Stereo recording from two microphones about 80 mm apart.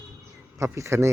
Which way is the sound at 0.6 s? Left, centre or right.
Right.